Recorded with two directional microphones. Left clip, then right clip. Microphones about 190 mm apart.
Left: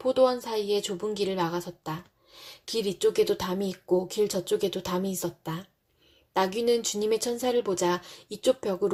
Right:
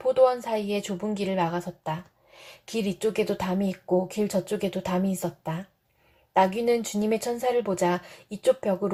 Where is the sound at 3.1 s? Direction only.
30° left (ahead or behind).